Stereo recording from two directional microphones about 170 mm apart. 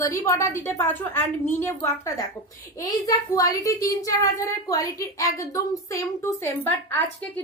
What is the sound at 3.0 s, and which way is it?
A woman's voice, 20° left (ahead or behind).